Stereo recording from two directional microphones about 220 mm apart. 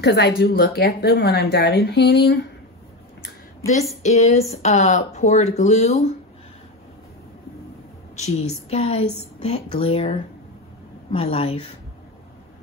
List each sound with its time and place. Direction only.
0.0 s speech: 50° left (ahead or behind)
4.0 s speech: 30° left (ahead or behind)
8.2 s a woman's voice: 30° left (ahead or behind)